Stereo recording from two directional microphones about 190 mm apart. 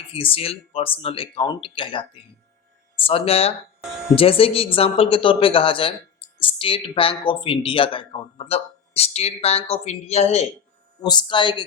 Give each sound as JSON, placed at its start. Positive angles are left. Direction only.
{"t": 0.1, "sound": "speech", "side_deg": 30}
{"t": 11.0, "sound": "speech", "side_deg": 25}